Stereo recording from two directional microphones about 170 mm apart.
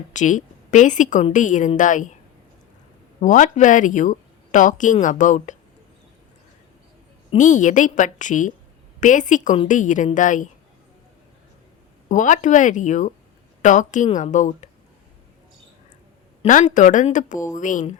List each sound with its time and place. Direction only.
0.1 s speech: 45° left (ahead or behind)
3.2 s speech: 50° left (ahead or behind)
7.3 s speech: 45° left (ahead or behind)
12.0 s speech: 50° left (ahead or behind)
16.5 s speech: 50° left (ahead or behind)